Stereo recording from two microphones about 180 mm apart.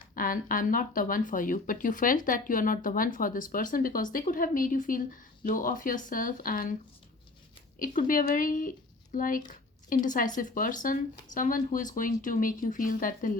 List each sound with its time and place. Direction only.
0.1 s speech: 50° left (ahead or behind)
7.8 s speech: 50° left (ahead or behind)